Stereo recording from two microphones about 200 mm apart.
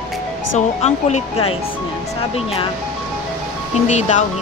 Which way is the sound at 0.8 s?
35° left (ahead or behind).